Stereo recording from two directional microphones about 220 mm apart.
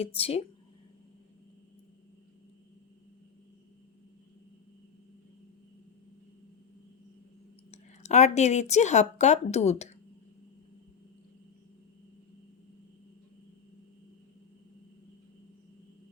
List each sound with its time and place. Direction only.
0.0 s speech: 25° left (ahead or behind)
7.7 s speech: 30° left (ahead or behind)